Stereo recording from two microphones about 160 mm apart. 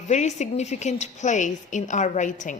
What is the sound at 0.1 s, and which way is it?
A woman's voice, 45° left (ahead or behind).